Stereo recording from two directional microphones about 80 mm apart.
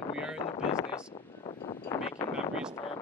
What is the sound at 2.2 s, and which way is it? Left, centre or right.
Speech, left.